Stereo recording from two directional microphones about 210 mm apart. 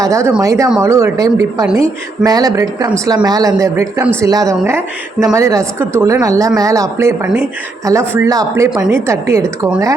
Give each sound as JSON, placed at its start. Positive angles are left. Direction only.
{"t": 0.0, "sound": "speech", "side_deg": -15}